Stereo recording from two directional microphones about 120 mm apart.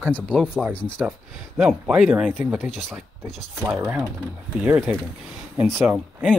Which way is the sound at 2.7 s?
5° left (ahead or behind).